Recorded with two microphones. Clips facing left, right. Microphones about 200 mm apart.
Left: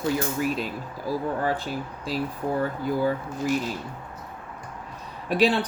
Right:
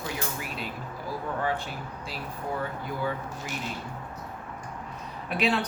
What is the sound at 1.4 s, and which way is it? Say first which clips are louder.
Speech: left 4 dB; 40° left (ahead or behind).